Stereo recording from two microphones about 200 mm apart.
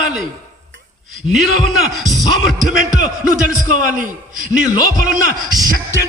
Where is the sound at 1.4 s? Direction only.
Centre (ahead or behind).